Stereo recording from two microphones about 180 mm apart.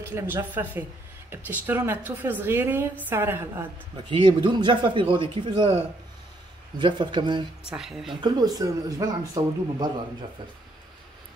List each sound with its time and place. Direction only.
0.1 s a woman's voice: 10° right (ahead or behind)
4.1 s speech: 25° right (ahead or behind)
6.8 s speech: 25° right (ahead or behind)
7.7 s a woman's voice: centre (ahead or behind)
8.1 s speech: 25° right (ahead or behind)